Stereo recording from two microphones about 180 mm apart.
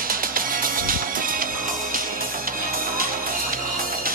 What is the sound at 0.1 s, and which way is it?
Music, 50° right (ahead or behind).